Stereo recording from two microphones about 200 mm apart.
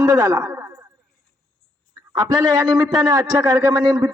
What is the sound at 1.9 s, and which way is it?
A man's voice, 20° right (ahead or behind).